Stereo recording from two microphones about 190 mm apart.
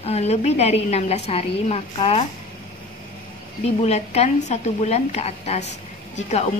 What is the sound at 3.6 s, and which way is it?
A woman's voice, 35° left (ahead or behind).